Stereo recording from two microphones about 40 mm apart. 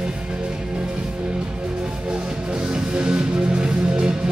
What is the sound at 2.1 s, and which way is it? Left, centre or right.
Music, right.